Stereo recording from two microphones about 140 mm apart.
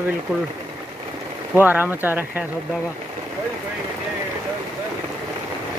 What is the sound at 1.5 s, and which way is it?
Speech, 15° right (ahead or behind).